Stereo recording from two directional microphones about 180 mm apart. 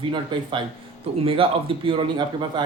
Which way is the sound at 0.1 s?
25° right (ahead or behind).